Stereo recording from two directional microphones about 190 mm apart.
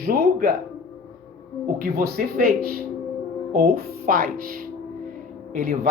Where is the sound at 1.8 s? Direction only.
55° right (ahead or behind).